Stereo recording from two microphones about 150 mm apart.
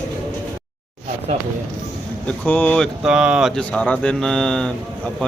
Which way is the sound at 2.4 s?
10° left (ahead or behind).